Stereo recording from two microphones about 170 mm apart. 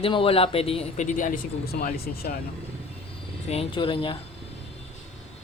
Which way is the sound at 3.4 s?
30° left (ahead or behind).